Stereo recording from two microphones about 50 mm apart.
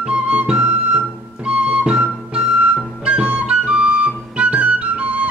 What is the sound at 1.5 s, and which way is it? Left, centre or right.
Music, right.